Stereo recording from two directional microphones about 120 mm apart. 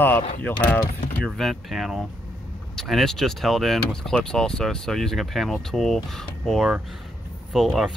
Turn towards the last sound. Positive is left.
turn(degrees=0)  # may be behind; listen again after turning